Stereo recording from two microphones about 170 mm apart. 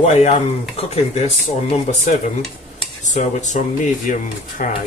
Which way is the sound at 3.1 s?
45° left (ahead or behind).